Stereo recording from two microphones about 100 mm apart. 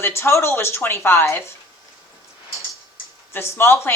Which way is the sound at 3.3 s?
25° left (ahead or behind).